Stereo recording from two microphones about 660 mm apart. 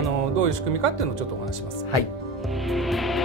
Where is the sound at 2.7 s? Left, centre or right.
Centre.